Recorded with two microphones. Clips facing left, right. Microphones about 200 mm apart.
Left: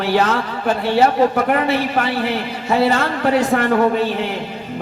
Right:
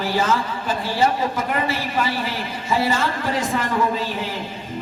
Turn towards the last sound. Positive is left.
turn(degrees=65)  # may be behind; listen again after turning